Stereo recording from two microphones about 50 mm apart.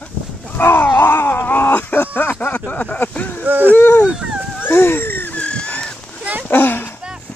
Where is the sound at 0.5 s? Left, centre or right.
Left.